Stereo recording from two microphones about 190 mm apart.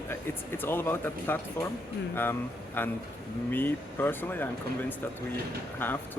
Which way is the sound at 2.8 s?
10° left (ahead or behind).